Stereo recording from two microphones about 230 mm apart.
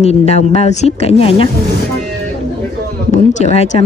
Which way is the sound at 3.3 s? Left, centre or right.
Left.